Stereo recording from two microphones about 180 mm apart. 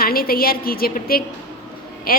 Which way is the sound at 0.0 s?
55° left (ahead or behind).